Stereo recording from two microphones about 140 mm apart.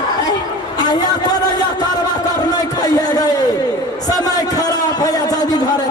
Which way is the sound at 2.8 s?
25° left (ahead or behind).